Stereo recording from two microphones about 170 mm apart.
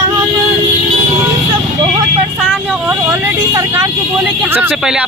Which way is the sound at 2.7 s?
10° right (ahead or behind).